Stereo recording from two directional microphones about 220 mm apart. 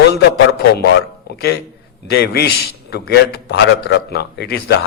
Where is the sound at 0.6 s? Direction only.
50° left (ahead or behind).